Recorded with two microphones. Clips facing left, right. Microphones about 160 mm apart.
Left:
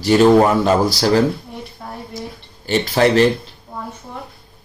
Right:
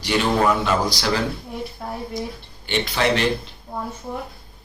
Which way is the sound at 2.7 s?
40° left (ahead or behind).